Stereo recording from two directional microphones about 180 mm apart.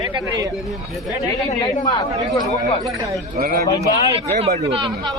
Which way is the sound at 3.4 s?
50° right (ahead or behind).